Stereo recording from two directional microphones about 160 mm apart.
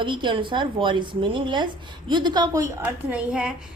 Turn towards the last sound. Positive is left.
turn(degrees=-5)  # may be behind; listen again after turning